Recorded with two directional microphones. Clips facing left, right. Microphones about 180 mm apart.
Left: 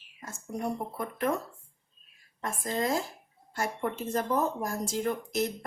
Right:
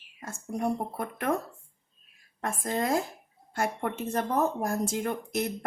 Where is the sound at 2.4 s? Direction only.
55° right (ahead or behind).